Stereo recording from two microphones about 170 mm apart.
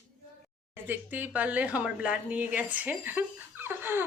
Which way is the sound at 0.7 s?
10° right (ahead or behind).